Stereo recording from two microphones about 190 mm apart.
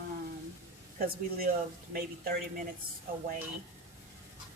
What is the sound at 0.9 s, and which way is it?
A woman's voice, 50° right (ahead or behind).